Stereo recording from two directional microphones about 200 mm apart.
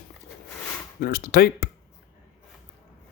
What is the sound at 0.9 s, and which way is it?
Speech, 50° left (ahead or behind).